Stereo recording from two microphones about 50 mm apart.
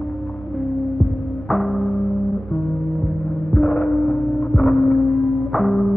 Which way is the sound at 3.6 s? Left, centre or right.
Centre.